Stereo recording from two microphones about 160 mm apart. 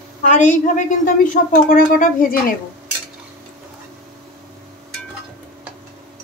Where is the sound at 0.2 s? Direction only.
50° left (ahead or behind).